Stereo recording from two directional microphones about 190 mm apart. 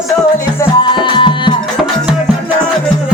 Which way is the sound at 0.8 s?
25° left (ahead or behind).